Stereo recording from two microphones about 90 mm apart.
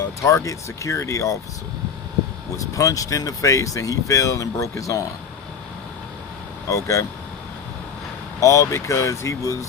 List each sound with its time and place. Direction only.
0.0 s speech: 35° left (ahead or behind)
2.6 s speech: 40° left (ahead or behind)
6.7 s speech: 35° left (ahead or behind)
8.4 s speech: 35° left (ahead or behind)